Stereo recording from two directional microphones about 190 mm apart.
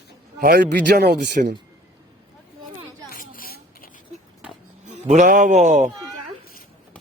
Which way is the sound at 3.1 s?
50° left (ahead or behind).